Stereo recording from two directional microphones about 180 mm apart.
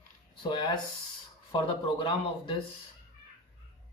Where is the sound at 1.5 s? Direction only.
30° left (ahead or behind).